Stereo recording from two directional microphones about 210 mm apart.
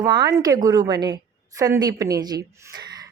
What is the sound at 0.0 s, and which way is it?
A woman's voice, 20° right (ahead or behind).